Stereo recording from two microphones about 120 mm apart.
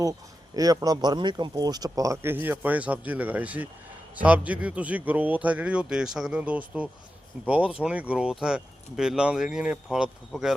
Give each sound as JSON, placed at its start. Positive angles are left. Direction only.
{"t": 0.0, "sound": "speech", "side_deg": -30}